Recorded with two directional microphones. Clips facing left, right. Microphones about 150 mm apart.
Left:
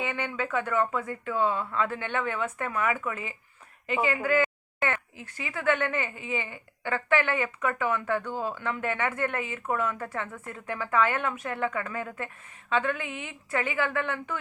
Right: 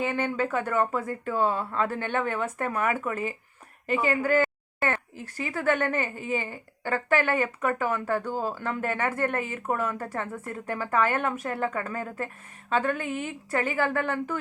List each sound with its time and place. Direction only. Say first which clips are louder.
0.0 s speech: right 4 dB; 40° right (ahead or behind)
8.2 s speech: right 2 dB; 5° right (ahead or behind)
8.5 s speech: right 1 dB; 40° right (ahead or behind)